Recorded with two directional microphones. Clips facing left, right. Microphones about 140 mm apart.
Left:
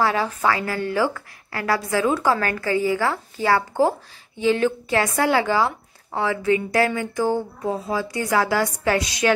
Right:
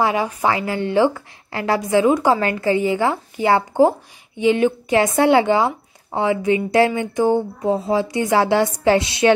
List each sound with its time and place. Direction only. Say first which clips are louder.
0.0 s a woman's voice: right 2 dB; 15° right (ahead or behind)